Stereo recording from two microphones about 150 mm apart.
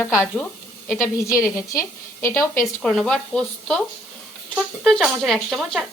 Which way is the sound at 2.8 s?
5° left (ahead or behind).